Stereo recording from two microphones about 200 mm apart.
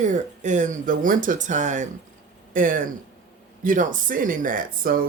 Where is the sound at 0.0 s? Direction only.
40° right (ahead or behind).